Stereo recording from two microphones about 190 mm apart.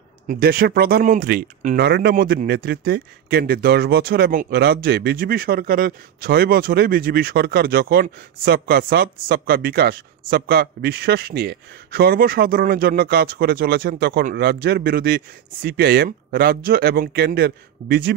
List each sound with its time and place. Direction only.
0.3 s speech: 50° right (ahead or behind)
1.8 s speech: 60° right (ahead or behind)